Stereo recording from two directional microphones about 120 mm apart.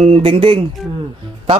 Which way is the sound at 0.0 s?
55° right (ahead or behind).